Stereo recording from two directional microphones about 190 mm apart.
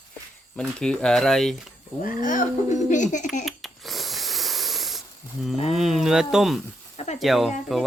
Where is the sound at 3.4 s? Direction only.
Centre (ahead or behind).